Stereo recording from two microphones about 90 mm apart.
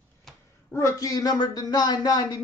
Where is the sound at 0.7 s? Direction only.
35° left (ahead or behind).